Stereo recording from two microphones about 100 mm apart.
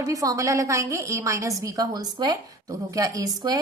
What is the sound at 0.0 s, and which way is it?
A woman's voice, 35° right (ahead or behind).